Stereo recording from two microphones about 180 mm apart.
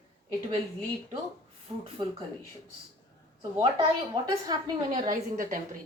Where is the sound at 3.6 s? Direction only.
25° right (ahead or behind).